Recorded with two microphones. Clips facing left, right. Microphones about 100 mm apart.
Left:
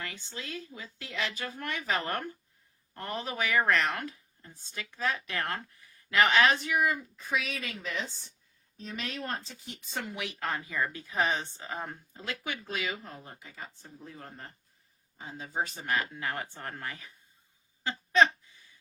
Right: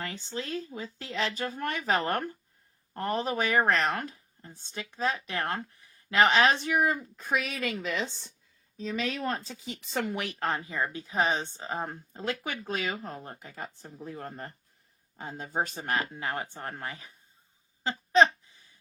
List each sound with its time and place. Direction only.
0.0 s speech: 35° right (ahead or behind)
7.2 s speech: 55° right (ahead or behind); by 8.3 s 90° right
9.6 s speech: 70° right (ahead or behind)
10.4 s speech: 30° right (ahead or behind); by 13.9 s 45° right (ahead or behind)
14.0 s speech: 60° right (ahead or behind); by 16.0 s 40° right (ahead or behind)
16.1 s speech: 25° right (ahead or behind)
17.8 s a sound: 30° right (ahead or behind)